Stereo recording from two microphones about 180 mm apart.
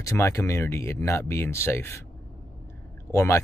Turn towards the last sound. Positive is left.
turn(degrees=15)  # may be behind; listen again after turning